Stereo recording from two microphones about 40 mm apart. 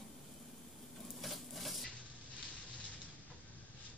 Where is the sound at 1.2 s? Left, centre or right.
Centre.